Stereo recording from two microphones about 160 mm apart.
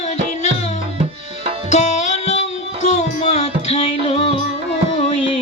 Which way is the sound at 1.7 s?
45° left (ahead or behind).